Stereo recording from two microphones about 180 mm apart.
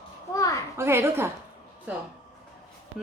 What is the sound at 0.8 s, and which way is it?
Speech, 15° right (ahead or behind).